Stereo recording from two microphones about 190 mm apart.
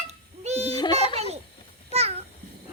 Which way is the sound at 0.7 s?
25° left (ahead or behind).